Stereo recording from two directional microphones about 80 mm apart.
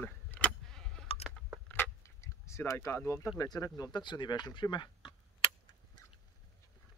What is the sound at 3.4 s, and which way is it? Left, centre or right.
Speech, left.